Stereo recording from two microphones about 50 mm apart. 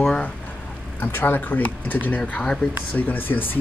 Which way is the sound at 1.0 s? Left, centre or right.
Left.